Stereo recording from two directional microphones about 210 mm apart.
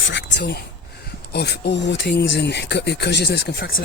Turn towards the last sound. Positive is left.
turn(degrees=45)  # may be behind; listen again after turning